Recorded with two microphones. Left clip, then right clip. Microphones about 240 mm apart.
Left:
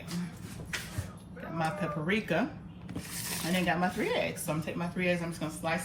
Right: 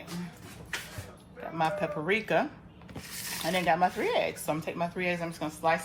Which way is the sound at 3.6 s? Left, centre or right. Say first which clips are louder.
Right 5 dB; right.